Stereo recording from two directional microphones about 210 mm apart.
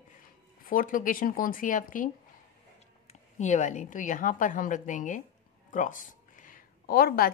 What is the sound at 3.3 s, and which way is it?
A woman's voice, 35° left (ahead or behind).